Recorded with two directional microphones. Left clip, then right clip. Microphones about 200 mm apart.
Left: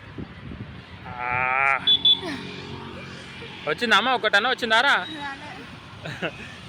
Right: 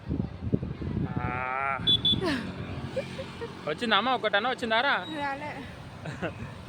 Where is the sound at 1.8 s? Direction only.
45° right (ahead or behind).